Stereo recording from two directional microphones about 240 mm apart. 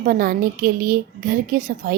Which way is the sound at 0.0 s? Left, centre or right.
Right.